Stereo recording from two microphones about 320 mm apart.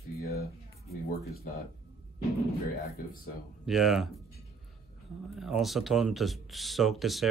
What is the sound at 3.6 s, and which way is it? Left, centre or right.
Speech, centre.